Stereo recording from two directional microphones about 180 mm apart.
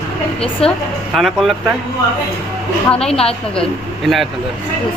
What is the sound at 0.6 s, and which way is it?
Speech, 35° left (ahead or behind).